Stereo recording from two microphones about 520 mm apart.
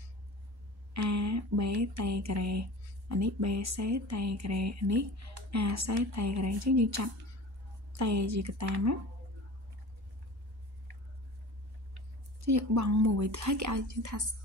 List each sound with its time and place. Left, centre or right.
0.9 s speech: right
12.4 s speech: right